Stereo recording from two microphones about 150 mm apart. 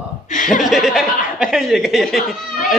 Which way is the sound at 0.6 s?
Centre (ahead or behind).